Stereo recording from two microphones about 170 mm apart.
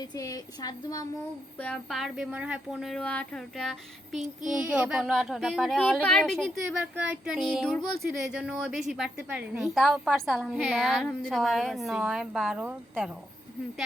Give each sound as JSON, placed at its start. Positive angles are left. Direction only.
{"t": 0.0, "sound": "speech", "side_deg": 20}
{"t": 1.5, "sound": "speech", "side_deg": 5}
{"t": 6.9, "sound": "speech", "side_deg": -10}